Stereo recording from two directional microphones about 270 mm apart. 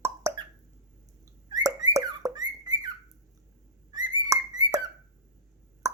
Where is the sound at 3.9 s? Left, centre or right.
Centre.